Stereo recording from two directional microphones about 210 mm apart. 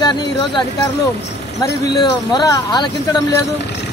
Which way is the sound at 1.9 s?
20° left (ahead or behind).